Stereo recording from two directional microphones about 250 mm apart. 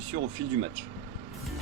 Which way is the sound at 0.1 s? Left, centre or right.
Right.